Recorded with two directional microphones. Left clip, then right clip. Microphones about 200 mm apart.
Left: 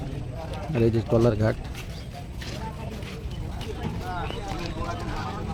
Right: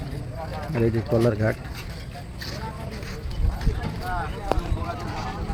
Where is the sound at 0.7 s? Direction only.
10° left (ahead or behind).